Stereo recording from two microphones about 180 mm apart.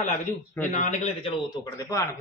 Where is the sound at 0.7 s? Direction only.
40° left (ahead or behind).